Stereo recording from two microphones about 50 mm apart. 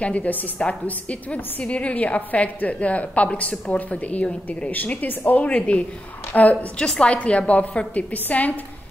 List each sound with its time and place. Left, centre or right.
0.0 s a woman's voice: left